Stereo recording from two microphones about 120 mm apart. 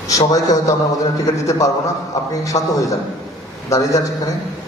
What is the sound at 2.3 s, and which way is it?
A man's voice, 30° left (ahead or behind).